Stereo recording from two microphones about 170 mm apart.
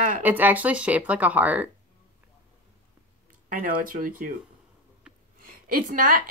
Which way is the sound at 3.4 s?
55° right (ahead or behind).